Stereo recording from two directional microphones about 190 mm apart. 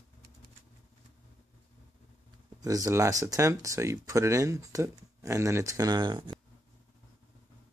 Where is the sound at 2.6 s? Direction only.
20° right (ahead or behind).